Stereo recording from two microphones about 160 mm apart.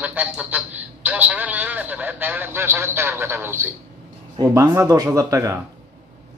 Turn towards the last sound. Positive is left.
turn(degrees=-20)  # may be behind; listen again after turning